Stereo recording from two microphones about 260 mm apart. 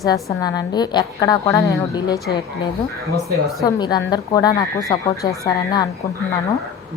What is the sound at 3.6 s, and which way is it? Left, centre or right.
A woman's voice, centre.